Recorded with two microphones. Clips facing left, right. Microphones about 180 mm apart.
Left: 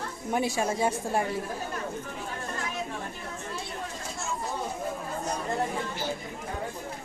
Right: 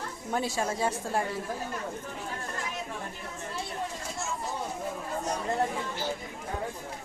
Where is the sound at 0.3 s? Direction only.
15° left (ahead or behind).